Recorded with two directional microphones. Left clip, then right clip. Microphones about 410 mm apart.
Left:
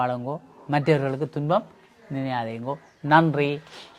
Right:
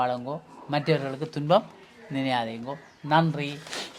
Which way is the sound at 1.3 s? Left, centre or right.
Left.